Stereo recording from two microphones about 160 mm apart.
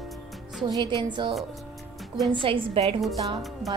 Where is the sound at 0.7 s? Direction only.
30° right (ahead or behind).